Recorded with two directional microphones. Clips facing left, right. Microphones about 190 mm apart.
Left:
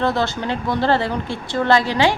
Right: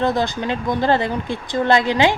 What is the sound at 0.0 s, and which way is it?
Speech, 15° right (ahead or behind).